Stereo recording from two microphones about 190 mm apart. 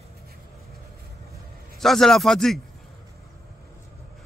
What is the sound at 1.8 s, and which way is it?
Speech, centre (ahead or behind).